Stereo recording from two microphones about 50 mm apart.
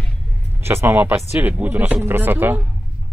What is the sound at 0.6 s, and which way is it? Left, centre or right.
Speech, right.